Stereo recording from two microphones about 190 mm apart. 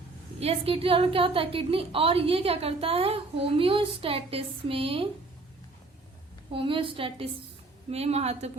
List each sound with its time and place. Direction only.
0.3 s a woman's voice: 30° right (ahead or behind)
6.5 s a woman's voice: 25° right (ahead or behind)